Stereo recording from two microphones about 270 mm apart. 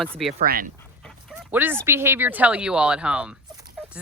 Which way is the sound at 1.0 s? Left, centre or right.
Centre.